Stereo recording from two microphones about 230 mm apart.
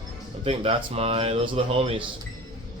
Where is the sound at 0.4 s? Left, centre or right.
Right.